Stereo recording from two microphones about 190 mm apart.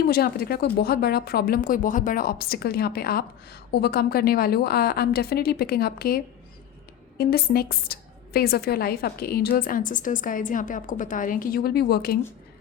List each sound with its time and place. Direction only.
0.0 s speech: 55° left (ahead or behind)